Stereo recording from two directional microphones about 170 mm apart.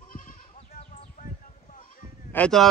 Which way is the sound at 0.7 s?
45° left (ahead or behind).